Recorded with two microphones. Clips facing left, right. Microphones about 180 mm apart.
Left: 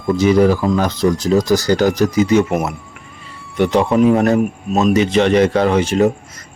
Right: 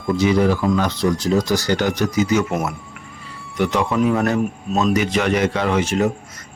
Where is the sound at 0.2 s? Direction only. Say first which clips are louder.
Left 5 dB; 45° left (ahead or behind).